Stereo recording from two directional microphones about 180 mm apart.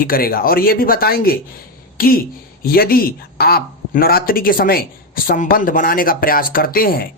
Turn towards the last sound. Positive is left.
turn(degrees=55)  # may be behind; listen again after turning